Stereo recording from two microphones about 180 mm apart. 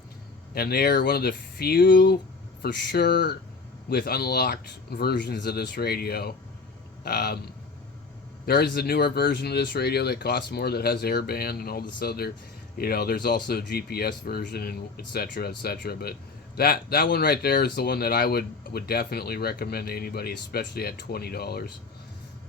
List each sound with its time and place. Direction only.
0.5 s speech: 60° left (ahead or behind)
8.4 s speech: 60° left (ahead or behind)